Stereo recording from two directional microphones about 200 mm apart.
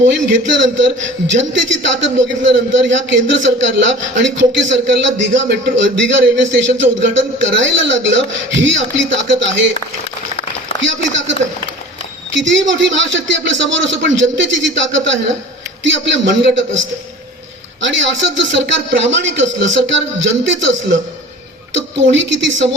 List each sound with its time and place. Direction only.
0.1 s a man's voice: 65° right (ahead or behind)
10.8 s a man's voice: 65° right (ahead or behind)
17.7 s a man's voice: 65° right (ahead or behind)